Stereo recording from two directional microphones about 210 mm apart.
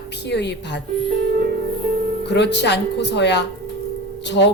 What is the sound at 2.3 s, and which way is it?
Speech, 55° left (ahead or behind).